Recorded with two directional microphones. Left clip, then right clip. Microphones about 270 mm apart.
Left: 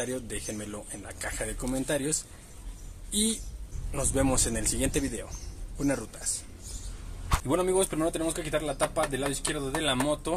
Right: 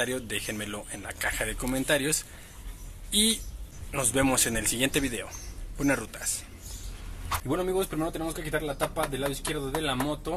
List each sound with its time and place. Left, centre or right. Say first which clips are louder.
0.0 s speech: right 4 dB; centre
7.4 s a man's voice: left 3 dB; left